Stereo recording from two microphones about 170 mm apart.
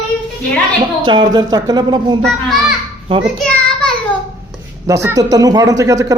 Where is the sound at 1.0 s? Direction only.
25° right (ahead or behind).